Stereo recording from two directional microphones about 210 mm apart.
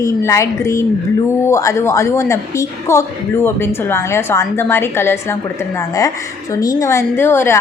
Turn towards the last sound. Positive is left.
turn(degrees=10)  # may be behind; listen again after turning